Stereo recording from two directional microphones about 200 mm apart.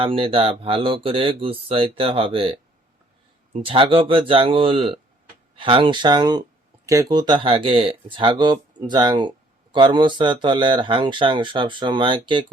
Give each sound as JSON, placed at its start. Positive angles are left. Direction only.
{"t": 0.0, "sound": "speech", "side_deg": -25}